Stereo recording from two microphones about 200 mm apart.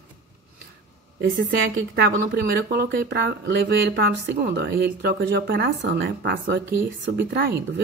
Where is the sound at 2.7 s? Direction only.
60° right (ahead or behind).